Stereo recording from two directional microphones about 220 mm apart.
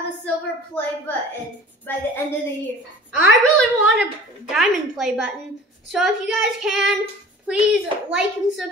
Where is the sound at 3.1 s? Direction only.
5° right (ahead or behind).